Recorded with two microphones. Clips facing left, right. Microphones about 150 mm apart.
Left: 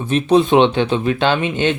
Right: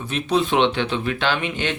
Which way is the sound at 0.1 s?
25° left (ahead or behind).